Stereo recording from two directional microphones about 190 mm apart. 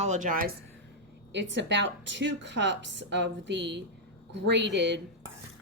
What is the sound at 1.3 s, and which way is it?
A woman's voice, 70° right (ahead or behind).